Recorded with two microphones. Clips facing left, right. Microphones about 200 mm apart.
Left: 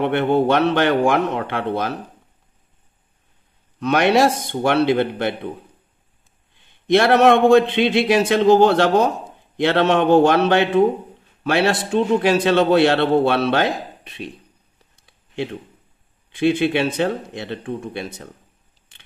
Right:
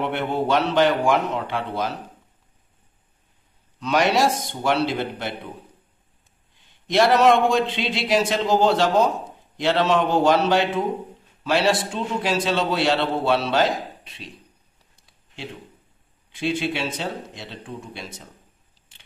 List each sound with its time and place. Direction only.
0.0 s a man's voice: 60° left (ahead or behind)
3.8 s a man's voice: 60° left (ahead or behind)
6.9 s a man's voice: 60° left (ahead or behind)
16.3 s a man's voice: 60° left (ahead or behind)